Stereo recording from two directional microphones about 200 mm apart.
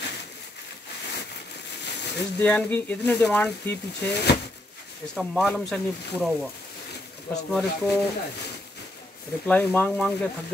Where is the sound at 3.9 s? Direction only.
55° left (ahead or behind).